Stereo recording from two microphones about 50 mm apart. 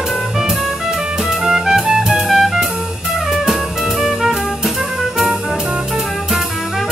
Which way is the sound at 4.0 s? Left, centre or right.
Centre.